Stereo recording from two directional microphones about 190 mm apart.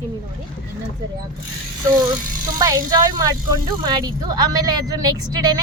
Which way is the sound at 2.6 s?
15° right (ahead or behind).